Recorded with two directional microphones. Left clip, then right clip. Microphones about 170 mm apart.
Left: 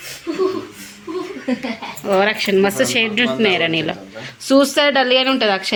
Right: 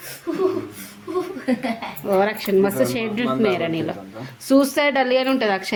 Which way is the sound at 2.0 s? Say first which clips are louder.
Left 4 dB; centre (ahead or behind).